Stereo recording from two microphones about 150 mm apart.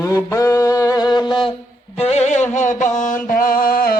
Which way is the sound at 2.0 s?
45° left (ahead or behind).